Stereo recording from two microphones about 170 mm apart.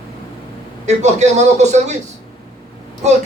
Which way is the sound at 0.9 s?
40° right (ahead or behind).